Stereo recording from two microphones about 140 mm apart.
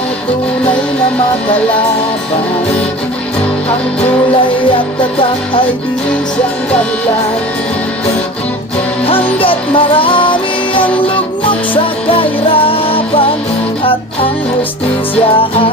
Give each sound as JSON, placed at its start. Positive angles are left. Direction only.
{"t": 9.0, "sound": "music", "side_deg": 40}
{"t": 12.0, "sound": "music", "side_deg": 40}